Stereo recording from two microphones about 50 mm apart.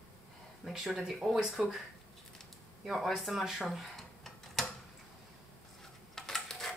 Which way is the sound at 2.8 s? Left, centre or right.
Centre.